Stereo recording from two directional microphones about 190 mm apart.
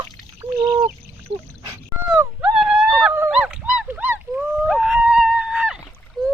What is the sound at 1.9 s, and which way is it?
Dog, 5° right (ahead or behind).